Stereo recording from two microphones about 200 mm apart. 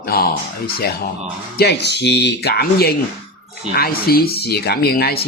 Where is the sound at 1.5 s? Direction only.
55° left (ahead or behind).